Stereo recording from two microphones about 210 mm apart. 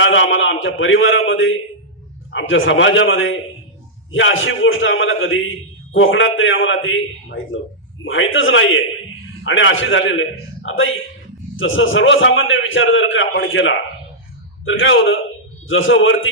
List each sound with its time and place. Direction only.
0.0 s a man's voice: 65° left (ahead or behind)